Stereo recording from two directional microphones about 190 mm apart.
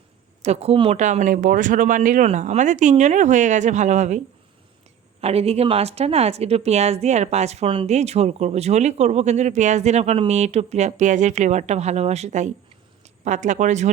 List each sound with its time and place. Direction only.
0.4 s a woman's voice: 35° right (ahead or behind)
5.2 s a woman's voice: 30° right (ahead or behind)